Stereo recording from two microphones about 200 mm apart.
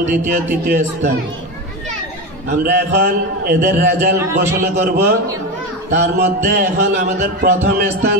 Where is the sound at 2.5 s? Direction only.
50° right (ahead or behind).